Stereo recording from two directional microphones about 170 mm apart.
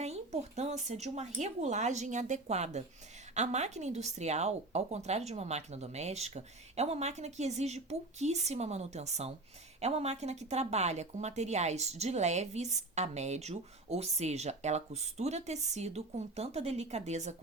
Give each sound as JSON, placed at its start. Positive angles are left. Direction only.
{"t": 0.0, "sound": "speech", "side_deg": -40}